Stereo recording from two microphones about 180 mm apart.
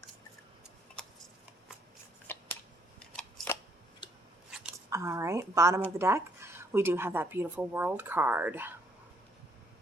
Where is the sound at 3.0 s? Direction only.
5° left (ahead or behind).